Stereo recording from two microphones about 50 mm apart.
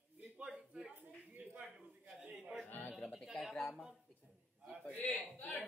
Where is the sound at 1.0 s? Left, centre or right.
Right.